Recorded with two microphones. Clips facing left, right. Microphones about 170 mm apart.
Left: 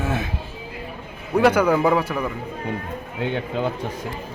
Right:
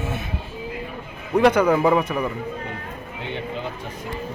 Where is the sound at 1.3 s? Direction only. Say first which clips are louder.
Even; 5° left (ahead or behind).